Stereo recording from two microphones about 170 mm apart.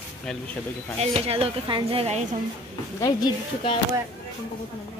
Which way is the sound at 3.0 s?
20° left (ahead or behind).